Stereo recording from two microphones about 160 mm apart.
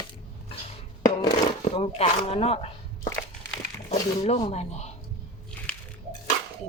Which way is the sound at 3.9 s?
45° left (ahead or behind).